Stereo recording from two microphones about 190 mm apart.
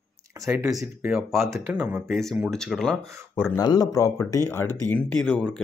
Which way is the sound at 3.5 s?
20° left (ahead or behind).